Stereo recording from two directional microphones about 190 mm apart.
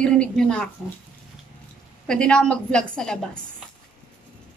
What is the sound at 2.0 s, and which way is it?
A woman's voice, 5° left (ahead or behind).